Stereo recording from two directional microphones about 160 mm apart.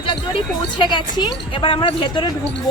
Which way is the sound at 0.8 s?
30° left (ahead or behind).